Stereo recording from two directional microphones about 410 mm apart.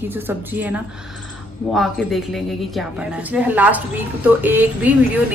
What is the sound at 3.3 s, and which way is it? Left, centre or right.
A woman's voice, centre.